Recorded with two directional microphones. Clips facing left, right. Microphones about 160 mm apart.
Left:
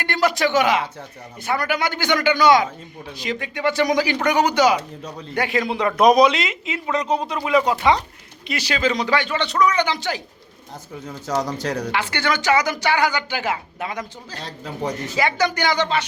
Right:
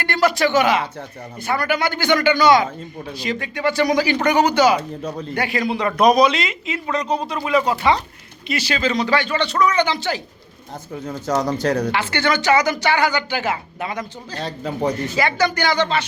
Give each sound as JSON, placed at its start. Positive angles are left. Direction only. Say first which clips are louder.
{"t": 0.0, "sound": "a woman's voice", "louder": "right 2 dB", "side_deg": 15}
{"t": 6.7, "sound": "speech", "louder": "even", "side_deg": 5}
{"t": 8.4, "sound": "a woman's voice", "louder": "even", "side_deg": 15}
{"t": 11.3, "sound": "a man's voice", "louder": "right 4 dB", "side_deg": -60}
{"t": 11.9, "sound": "a woman's voice", "louder": "right 2 dB", "side_deg": 10}
{"t": 14.3, "sound": "a man's voice", "louder": "right 6 dB", "side_deg": -60}
{"t": 15.1, "sound": "a woman's voice", "louder": "right 1 dB", "side_deg": 15}